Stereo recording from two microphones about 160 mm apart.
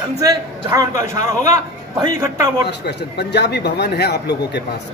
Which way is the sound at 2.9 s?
90° left.